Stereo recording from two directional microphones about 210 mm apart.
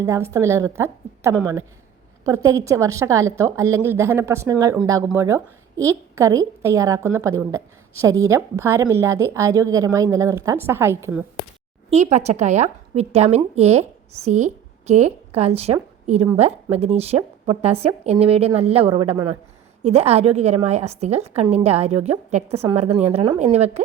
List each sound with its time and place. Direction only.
0.0 s a woman's voice: 10° right (ahead or behind)
11.9 s a woman's voice: 30° right (ahead or behind)